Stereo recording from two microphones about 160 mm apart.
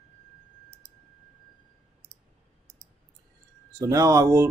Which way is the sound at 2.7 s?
50° right (ahead or behind).